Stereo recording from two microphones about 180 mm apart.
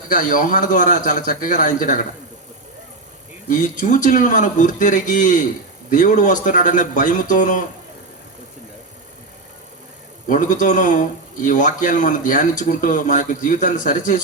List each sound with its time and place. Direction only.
0.1 s speech: 45° left (ahead or behind)
3.5 s speech: 45° left (ahead or behind)
10.2 s speech: 45° left (ahead or behind)